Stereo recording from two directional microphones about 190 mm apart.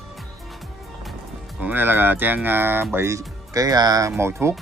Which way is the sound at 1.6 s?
10° right (ahead or behind).